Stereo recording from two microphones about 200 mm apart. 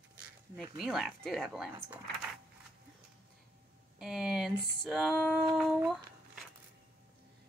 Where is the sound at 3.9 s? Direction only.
Centre (ahead or behind).